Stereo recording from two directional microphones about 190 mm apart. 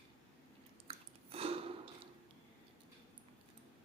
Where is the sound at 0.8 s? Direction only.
30° right (ahead or behind).